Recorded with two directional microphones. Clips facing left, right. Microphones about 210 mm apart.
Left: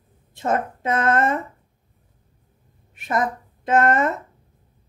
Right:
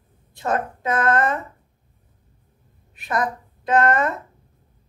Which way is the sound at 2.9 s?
25° left (ahead or behind).